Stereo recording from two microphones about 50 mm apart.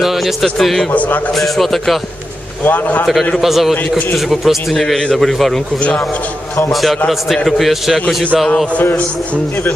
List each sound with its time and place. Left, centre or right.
0.0 s a man's voice: centre
0.9 s a man's voice: left
1.3 s a man's voice: centre
2.6 s a man's voice: left
3.3 s a man's voice: centre
5.8 s a man's voice: left
6.7 s a man's voice: centre